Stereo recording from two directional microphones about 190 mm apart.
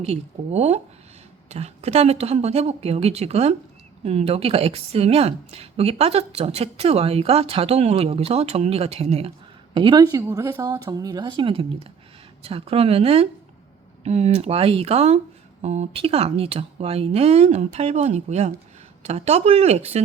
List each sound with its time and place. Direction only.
0.0 s a woman's voice: 35° right (ahead or behind)